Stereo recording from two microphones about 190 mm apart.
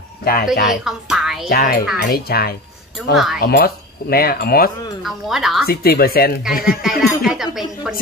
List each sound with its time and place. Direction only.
0.2 s speech: 50° left (ahead or behind)
0.5 s speech: centre (ahead or behind)
1.5 s speech: 55° left (ahead or behind)
5.0 s speech: centre (ahead or behind)
5.7 s speech: 55° left (ahead or behind)
6.8 s speech: centre (ahead or behind)